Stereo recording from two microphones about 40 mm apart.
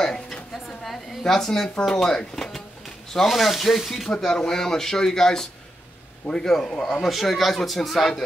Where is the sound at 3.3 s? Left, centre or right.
Centre.